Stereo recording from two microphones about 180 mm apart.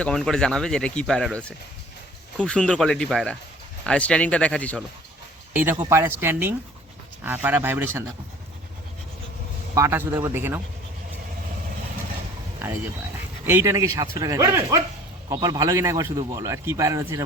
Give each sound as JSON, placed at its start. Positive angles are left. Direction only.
{"t": 0.0, "sound": "speech", "side_deg": 5}
{"t": 5.8, "sound": "a man's voice", "side_deg": -15}
{"t": 9.7, "sound": "a man's voice", "side_deg": -15}
{"t": 13.4, "sound": "a man's voice", "side_deg": -15}